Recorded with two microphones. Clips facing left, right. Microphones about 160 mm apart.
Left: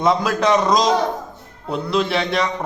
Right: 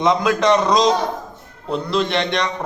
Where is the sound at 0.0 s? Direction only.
5° left (ahead or behind).